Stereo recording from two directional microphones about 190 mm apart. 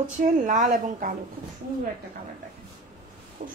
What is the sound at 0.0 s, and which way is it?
A woman's voice, 40° right (ahead or behind).